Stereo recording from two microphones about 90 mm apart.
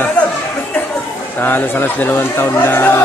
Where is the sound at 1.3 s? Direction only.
20° left (ahead or behind).